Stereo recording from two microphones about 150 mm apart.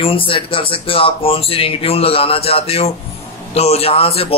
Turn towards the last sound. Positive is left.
turn(degrees=40)  # may be behind; listen again after turning